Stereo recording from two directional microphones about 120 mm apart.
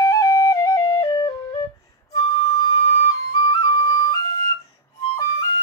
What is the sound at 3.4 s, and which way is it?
Flute, 35° left (ahead or behind).